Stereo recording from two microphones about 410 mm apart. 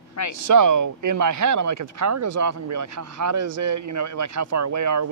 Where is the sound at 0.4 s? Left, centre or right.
Right.